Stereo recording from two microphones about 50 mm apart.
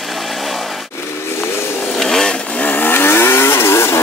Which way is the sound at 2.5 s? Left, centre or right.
Left.